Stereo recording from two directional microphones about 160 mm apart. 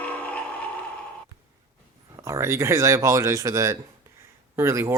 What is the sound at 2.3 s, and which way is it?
Speech, 15° right (ahead or behind).